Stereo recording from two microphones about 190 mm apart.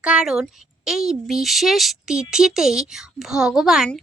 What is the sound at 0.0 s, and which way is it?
Speech, 5° right (ahead or behind).